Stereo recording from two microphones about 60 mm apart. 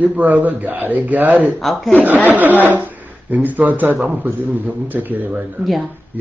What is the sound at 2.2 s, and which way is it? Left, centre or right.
Speech, right.